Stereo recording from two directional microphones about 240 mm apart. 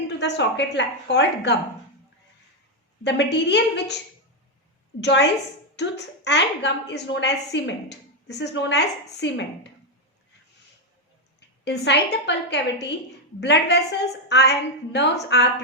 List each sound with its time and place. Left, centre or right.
0.2 s a woman's voice: left
3.0 s a woman's voice: left
4.9 s a woman's voice: left
11.3 s a woman's voice: left